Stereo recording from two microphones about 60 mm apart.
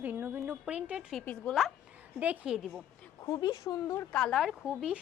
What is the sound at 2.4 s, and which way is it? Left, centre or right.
Speech, centre.